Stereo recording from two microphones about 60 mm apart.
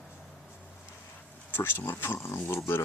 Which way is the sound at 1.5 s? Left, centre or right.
Left.